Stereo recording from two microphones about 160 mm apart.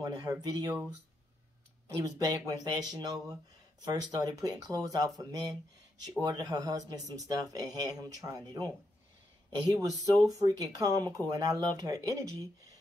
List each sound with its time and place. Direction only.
0.0 s speech: 25° right (ahead or behind)
1.9 s speech: 20° right (ahead or behind)
9.7 s speech: 20° right (ahead or behind)